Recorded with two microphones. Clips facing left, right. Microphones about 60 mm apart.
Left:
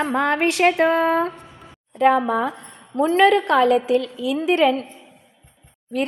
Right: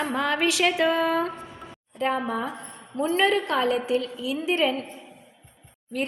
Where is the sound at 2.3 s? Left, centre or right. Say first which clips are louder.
Left 7 dB; left.